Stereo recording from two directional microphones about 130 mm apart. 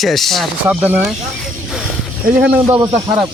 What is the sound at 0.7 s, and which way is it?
Speech, 15° right (ahead or behind).